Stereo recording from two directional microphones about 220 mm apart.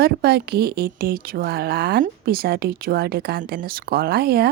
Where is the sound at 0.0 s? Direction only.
45° right (ahead or behind).